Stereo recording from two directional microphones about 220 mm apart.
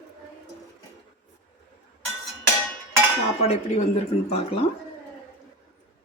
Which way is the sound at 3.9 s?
25° left (ahead or behind).